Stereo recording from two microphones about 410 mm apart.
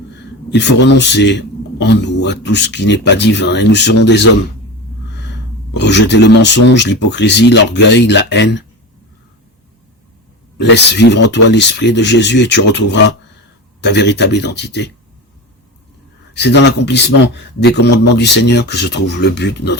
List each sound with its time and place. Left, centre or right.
0.5 s a man's voice: left
5.7 s a man's voice: left
10.6 s a man's voice: left
16.3 s a man's voice: left